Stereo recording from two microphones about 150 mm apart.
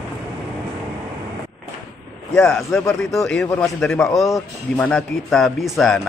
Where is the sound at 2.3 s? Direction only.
5° left (ahead or behind).